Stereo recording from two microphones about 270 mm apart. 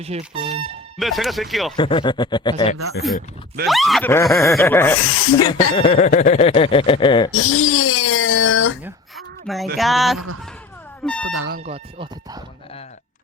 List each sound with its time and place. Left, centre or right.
0.0 s speech: right
0.9 s speech: centre
1.7 s snicker: centre
3.7 s snicker: centre
5.0 s speech: left
5.4 s speech: centre
7.3 s a sound: left
8.8 s a sound: centre
9.7 s speech: centre
11.0 s alarm: centre
11.4 s speech: right
11.7 s speech: centre